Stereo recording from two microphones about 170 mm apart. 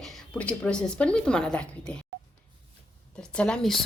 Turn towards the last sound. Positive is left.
turn(degrees=5)  # may be behind; listen again after turning